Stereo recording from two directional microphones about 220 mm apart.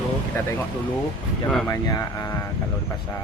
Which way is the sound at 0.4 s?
10° left (ahead or behind).